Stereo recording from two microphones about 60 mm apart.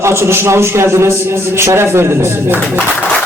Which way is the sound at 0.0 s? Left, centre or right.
Right.